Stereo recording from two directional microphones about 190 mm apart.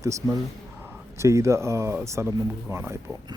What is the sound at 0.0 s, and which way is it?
Speech, 15° right (ahead or behind).